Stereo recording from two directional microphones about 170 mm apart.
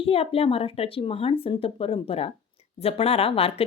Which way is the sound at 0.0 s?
35° left (ahead or behind).